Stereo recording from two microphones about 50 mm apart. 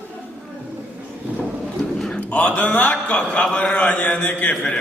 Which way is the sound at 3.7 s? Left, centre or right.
Left.